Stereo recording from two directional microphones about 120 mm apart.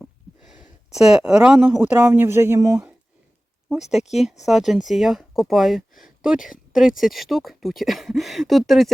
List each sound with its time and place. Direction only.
0.4 s a sound: 10° right (ahead or behind)
0.9 s speech: 5° right (ahead or behind); by 2.9 s 25° right (ahead or behind)
3.7 s speech: 5° right (ahead or behind)